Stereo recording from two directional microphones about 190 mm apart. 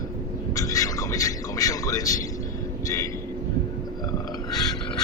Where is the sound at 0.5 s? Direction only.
15° left (ahead or behind).